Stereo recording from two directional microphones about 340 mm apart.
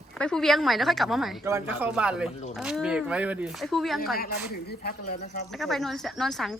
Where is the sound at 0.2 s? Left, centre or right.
Centre.